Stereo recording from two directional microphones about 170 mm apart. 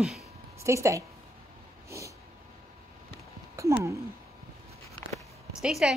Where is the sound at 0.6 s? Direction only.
15° right (ahead or behind).